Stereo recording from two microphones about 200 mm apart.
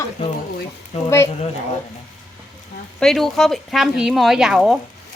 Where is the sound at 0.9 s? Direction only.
30° left (ahead or behind).